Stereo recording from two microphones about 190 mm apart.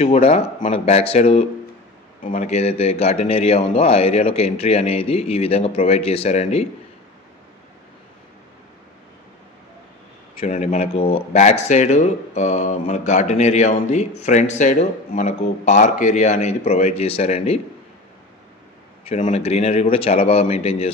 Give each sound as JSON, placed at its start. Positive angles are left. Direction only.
{"t": 0.0, "sound": "speech", "side_deg": 35}
{"t": 10.4, "sound": "speech", "side_deg": 35}
{"t": 19.0, "sound": "speech", "side_deg": 35}